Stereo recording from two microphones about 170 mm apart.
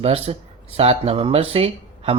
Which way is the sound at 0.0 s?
35° right (ahead or behind).